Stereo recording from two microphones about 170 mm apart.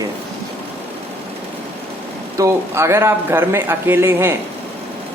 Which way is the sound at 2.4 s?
15° right (ahead or behind).